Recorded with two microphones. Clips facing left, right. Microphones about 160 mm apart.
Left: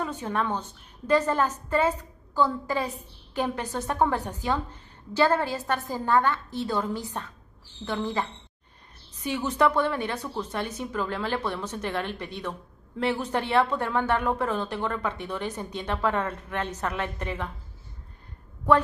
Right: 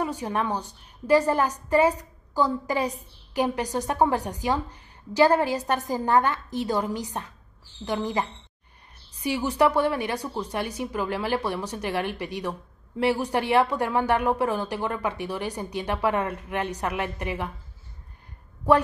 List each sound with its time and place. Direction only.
0.0 s a woman's voice: 15° right (ahead or behind)